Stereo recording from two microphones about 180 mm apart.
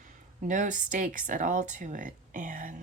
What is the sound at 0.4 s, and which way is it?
Speech, 45° right (ahead or behind).